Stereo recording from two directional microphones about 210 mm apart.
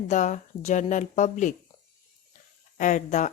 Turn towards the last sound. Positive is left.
turn(degrees=35)  # may be behind; listen again after turning